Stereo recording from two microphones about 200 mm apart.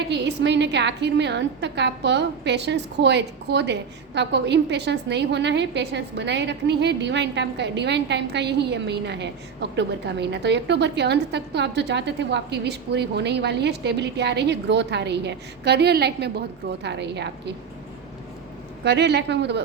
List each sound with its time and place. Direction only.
0.1 s a woman's voice: 60° right (ahead or behind)
18.9 s a woman's voice: 55° right (ahead or behind)